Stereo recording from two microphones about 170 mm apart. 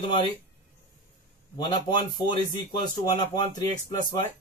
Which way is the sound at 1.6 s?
25° left (ahead or behind).